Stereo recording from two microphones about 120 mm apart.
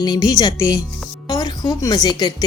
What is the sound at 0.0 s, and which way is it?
A woman's voice, 35° left (ahead or behind).